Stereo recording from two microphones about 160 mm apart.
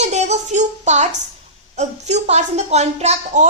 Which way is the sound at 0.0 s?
45° right (ahead or behind).